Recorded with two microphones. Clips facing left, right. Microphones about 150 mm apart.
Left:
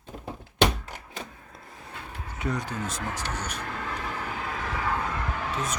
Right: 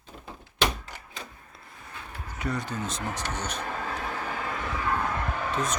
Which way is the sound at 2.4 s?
15° left (ahead or behind).